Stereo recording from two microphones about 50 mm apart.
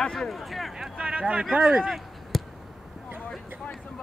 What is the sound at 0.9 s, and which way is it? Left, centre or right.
Speech, right.